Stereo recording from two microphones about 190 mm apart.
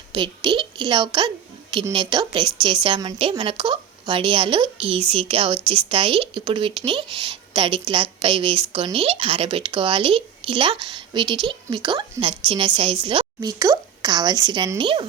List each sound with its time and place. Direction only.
0.1 s speech: 25° right (ahead or behind)